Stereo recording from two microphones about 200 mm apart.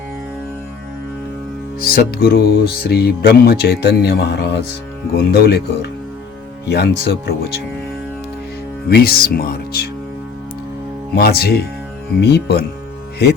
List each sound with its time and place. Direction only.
1.8 s speech: 50° left (ahead or behind)
8.9 s speech: 50° left (ahead or behind)
11.1 s speech: 55° left (ahead or behind)